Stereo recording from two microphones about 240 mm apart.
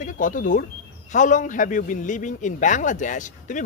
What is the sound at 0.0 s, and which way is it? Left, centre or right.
Speech, left.